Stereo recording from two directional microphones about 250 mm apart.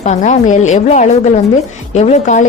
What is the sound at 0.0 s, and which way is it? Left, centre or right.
Speech, left.